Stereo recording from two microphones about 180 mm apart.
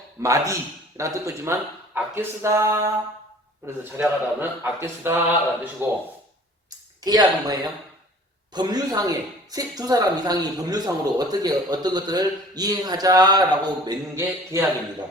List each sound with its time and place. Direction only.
0.2 s speech: 15° right (ahead or behind)
4.0 s speech: 10° right (ahead or behind)
7.0 s speech: 20° right (ahead or behind)